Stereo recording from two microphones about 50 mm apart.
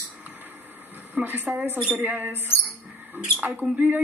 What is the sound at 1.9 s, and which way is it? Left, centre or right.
Speech, right.